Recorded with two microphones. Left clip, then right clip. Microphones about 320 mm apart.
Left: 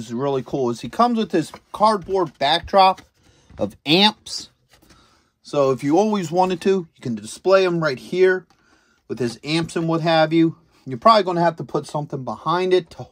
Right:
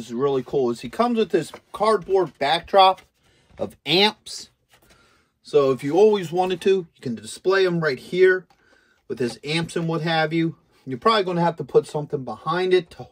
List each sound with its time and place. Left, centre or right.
0.0 s speech: left
5.6 s speech: centre